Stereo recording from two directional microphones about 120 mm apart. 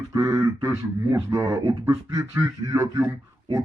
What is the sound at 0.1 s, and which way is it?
Speech, 25° right (ahead or behind).